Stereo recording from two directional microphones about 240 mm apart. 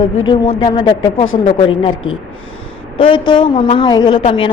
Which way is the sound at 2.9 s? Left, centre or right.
Left.